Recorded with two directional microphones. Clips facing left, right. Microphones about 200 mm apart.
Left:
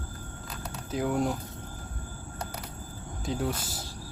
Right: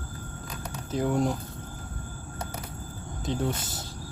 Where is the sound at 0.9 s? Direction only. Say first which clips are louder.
Right 2 dB; 5° left (ahead or behind).